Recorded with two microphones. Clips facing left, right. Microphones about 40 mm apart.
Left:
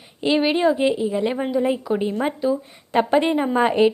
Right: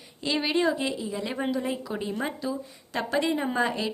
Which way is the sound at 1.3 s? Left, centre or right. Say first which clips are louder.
Left 7 dB; centre.